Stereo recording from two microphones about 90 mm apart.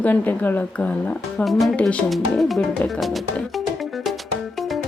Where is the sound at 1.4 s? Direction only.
Centre (ahead or behind).